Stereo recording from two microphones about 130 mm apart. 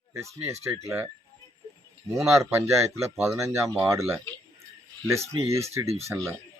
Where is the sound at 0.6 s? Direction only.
20° right (ahead or behind).